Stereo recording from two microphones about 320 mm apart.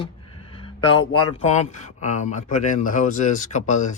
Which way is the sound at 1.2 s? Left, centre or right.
Centre.